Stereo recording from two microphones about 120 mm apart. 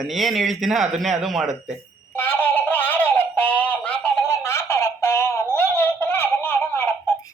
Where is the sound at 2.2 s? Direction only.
15° left (ahead or behind).